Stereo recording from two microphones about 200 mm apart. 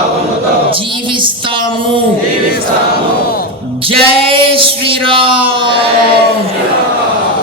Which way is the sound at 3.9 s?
25° right (ahead or behind).